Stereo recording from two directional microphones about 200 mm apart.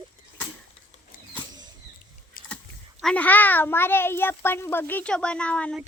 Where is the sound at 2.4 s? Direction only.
45° left (ahead or behind).